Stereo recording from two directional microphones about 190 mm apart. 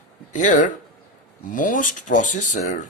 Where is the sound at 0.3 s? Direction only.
40° left (ahead or behind).